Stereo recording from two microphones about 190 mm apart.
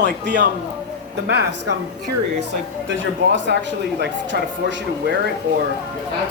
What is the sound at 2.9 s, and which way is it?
Speech, 75° right (ahead or behind).